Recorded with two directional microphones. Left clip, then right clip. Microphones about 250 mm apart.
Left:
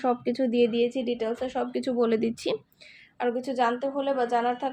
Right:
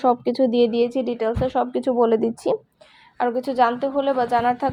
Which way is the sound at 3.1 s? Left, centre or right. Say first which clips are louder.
Right 7 dB; right.